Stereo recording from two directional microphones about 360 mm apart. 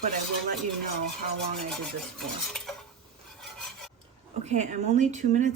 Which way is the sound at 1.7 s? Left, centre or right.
Centre.